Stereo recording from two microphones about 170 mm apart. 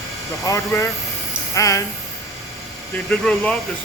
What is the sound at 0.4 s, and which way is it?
Speech, 15° left (ahead or behind).